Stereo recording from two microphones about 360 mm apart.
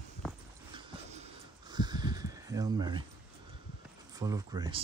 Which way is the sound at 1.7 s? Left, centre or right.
Centre.